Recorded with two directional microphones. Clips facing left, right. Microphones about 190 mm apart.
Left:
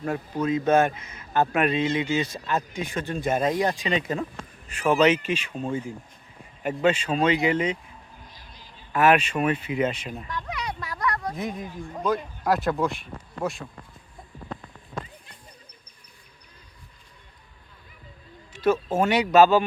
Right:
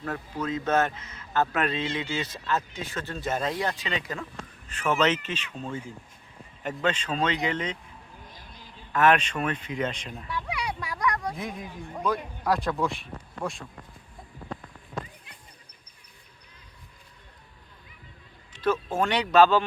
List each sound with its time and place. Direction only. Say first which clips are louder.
0.4 s a man's voice: left 5 dB; 10° left (ahead or behind)
8.3 s music: right 1 dB; 50° right (ahead or behind)
8.9 s a man's voice: left 2 dB; 10° left (ahead or behind)
10.2 s a sound: right 2 dB; 10° right (ahead or behind)
11.3 s speech: left 4 dB; centre (ahead or behind)
18.5 s speech: left 4 dB; 10° left (ahead or behind)